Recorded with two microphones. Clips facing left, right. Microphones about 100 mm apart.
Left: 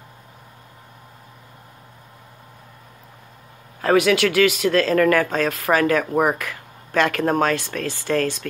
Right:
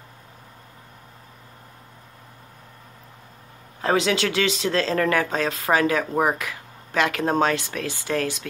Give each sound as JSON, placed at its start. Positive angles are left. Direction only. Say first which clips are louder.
{"t": 3.8, "sound": "speech", "louder": "left 5 dB", "side_deg": -25}